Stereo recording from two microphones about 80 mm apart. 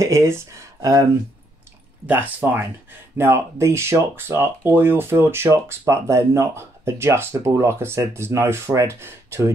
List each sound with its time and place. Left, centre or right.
0.0 s speech: right
2.0 s speech: right